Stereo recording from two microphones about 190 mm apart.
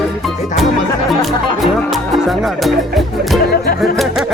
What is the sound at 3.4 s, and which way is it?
Music, 55° left (ahead or behind).